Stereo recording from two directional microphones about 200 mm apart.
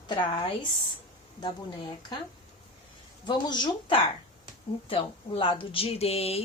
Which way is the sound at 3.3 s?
20° left (ahead or behind).